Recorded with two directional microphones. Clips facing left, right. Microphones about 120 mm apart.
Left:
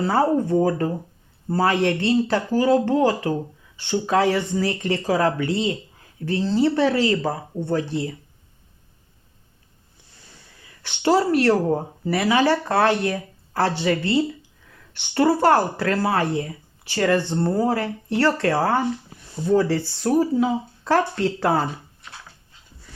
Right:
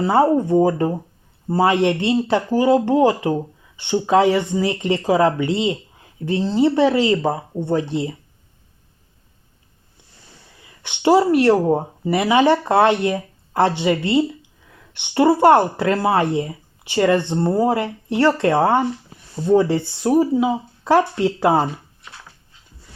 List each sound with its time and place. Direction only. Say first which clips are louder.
0.0 s speech: right 4 dB; 15° right (ahead or behind)
10.8 s speech: right 4 dB; 15° right (ahead or behind)